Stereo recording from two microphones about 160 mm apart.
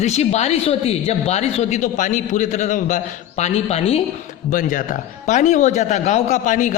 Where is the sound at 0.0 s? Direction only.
45° left (ahead or behind).